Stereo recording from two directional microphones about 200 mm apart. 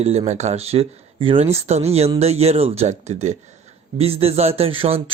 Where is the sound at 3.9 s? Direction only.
30° right (ahead or behind).